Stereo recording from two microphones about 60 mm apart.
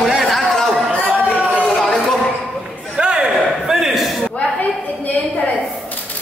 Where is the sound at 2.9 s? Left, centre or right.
Centre.